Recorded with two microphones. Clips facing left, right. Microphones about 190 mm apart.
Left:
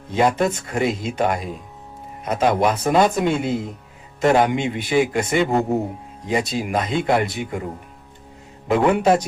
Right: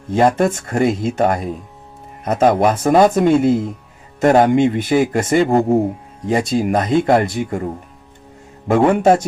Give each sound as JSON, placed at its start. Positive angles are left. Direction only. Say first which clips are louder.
{"t": 0.1, "sound": "speech", "louder": "right 4 dB", "side_deg": -50}